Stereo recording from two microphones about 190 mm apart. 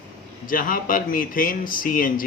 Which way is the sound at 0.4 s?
45° left (ahead or behind).